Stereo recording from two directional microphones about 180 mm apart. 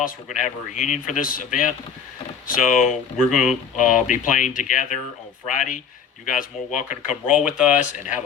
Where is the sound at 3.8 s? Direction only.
45° left (ahead or behind).